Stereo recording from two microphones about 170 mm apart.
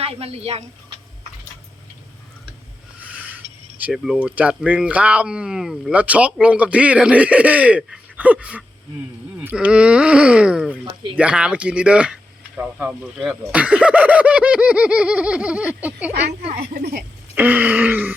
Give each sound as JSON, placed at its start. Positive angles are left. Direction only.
{"t": 0.0, "sound": "speech", "side_deg": -35}
{"t": 3.8, "sound": "speech", "side_deg": -5}